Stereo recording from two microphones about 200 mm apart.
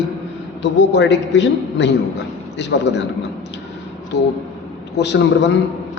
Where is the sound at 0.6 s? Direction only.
65° left (ahead or behind).